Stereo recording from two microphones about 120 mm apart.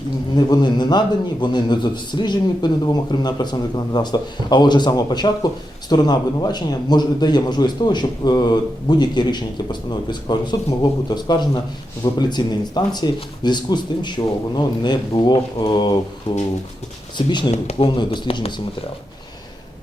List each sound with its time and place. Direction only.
0.3 s a man's voice: 35° left (ahead or behind)
17.2 s a man's voice: 40° left (ahead or behind)
17.5 s speech: 60° left (ahead or behind)
17.8 s speech: 45° left (ahead or behind)